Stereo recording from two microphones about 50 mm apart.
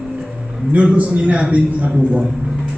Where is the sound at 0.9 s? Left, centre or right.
Right.